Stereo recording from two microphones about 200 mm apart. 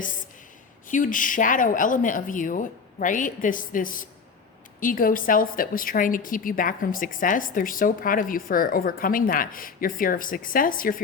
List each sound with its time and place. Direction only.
0.9 s a woman's voice: 40° left (ahead or behind)